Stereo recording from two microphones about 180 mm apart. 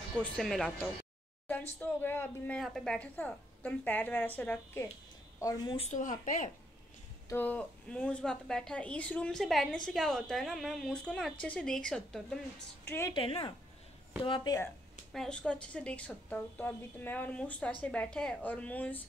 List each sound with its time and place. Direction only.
0.2 s a woman's voice: 5° left (ahead or behind)
5.4 s speech: 20° left (ahead or behind)
5.9 s speech: 45° left (ahead or behind)
7.2 s a woman's voice: 10° left (ahead or behind)
13.1 s speech: 30° left (ahead or behind)
15.1 s a woman's voice: 5° left (ahead or behind)